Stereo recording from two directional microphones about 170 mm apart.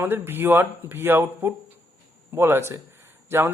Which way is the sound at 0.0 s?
10° right (ahead or behind).